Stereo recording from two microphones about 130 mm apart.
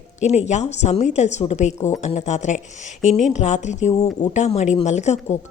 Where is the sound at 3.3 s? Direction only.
65° left (ahead or behind).